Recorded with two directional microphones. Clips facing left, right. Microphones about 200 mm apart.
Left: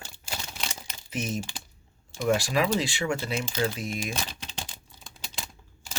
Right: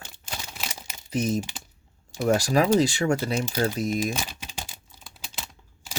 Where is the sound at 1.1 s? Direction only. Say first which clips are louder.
Right 6 dB; 40° right (ahead or behind).